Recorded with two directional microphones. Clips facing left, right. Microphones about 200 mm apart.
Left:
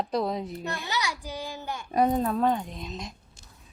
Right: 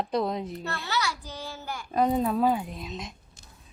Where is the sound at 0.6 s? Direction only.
15° left (ahead or behind).